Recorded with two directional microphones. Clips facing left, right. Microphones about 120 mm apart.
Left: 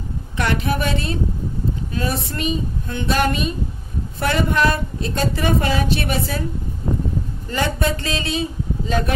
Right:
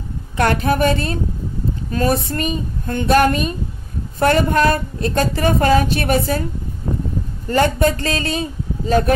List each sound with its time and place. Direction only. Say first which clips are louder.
0.4 s speech: right 5 dB; 45° right (ahead or behind)
7.4 s speech: right 7 dB; 45° right (ahead or behind)